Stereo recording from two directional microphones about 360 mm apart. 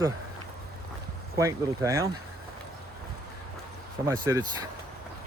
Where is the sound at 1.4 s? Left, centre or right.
Centre.